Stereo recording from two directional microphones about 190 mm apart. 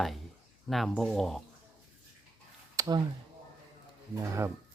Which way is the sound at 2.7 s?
20° right (ahead or behind).